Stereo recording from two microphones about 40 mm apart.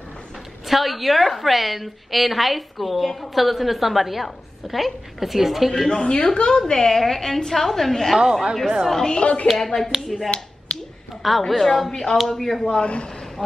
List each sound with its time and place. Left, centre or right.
0.7 s a woman's voice: centre
5.9 s a woman's voice: centre
6.1 s a woman's voice: left
6.6 s a woman's voice: centre
8.2 s speech: centre
8.9 s a woman's voice: centre
9.6 s a woman's voice: centre
12.7 s a woman's voice: left